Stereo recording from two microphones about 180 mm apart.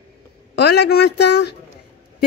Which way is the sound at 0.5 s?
65° left (ahead or behind).